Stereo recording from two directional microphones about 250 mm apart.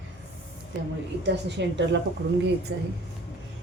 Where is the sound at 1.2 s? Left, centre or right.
Right.